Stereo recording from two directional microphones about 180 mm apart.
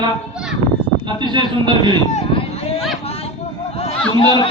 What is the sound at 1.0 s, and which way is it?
Speech, 25° right (ahead or behind).